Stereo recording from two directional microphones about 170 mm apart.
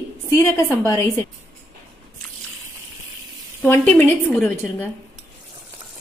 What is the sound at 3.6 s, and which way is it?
Speech, 10° left (ahead or behind).